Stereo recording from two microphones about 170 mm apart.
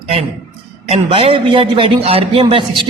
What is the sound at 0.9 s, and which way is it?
A man's voice, 35° right (ahead or behind).